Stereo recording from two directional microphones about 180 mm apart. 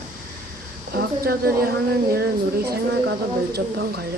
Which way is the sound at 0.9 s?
60° right (ahead or behind).